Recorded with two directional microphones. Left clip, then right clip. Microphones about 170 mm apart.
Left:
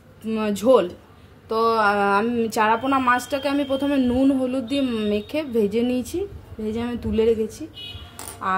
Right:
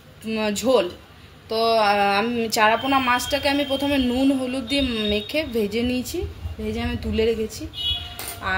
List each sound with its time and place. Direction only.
0.3 s speech: 60° left (ahead or behind)